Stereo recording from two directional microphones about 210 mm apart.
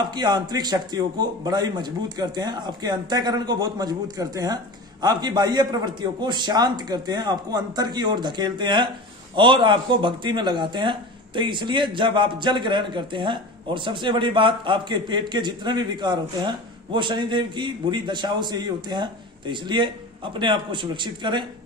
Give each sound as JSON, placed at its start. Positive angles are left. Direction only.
{"t": 0.1, "sound": "speech", "side_deg": -20}